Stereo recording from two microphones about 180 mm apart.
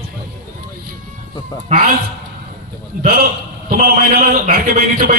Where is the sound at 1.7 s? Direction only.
35° right (ahead or behind).